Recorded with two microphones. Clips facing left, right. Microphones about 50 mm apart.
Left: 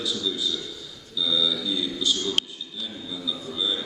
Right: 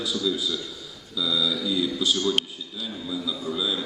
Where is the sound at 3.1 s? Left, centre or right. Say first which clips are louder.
Right 5 dB; right.